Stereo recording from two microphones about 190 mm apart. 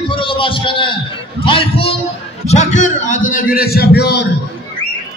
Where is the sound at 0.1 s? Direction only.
25° left (ahead or behind); by 4.3 s 60° left (ahead or behind).